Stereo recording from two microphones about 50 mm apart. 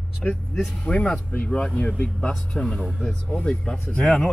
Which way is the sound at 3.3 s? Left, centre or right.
Left.